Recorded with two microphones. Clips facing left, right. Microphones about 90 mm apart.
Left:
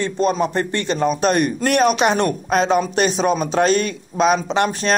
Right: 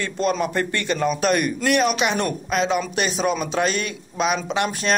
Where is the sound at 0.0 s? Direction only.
30° left (ahead or behind).